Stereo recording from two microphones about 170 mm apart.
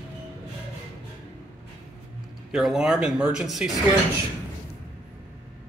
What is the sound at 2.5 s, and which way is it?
Speech, 5° right (ahead or behind).